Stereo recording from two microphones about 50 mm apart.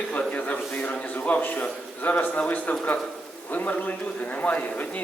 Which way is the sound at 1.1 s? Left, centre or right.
Left.